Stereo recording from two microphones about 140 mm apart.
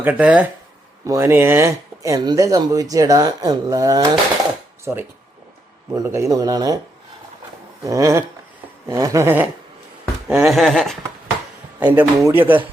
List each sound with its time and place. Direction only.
0.0 s a man's voice: 10° right (ahead or behind)
1.0 s speech: 20° right (ahead or behind)
4.9 s a man's voice: 15° right (ahead or behind)
7.9 s speech: 20° right (ahead or behind)
10.2 s a sound: 5° right (ahead or behind)
11.9 s a man's voice: 15° right (ahead or behind)